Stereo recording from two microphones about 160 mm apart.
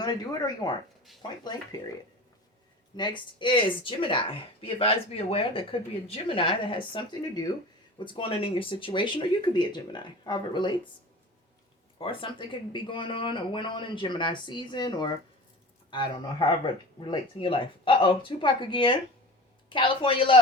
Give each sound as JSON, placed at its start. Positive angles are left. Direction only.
{"t": 0.0, "sound": "speech", "side_deg": 25}
{"t": 2.9, "sound": "speech", "side_deg": 30}
{"t": 11.9, "sound": "speech", "side_deg": 35}